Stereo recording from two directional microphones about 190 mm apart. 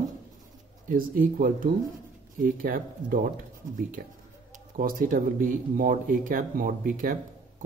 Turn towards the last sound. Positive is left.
turn(degrees=-45)  # may be behind; listen again after turning